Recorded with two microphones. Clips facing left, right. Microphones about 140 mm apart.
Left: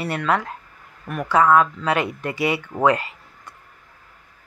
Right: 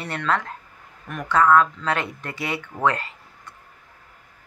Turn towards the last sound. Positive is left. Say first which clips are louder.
# left 2 dB
turn(degrees=15)  # may be behind; listen again after turning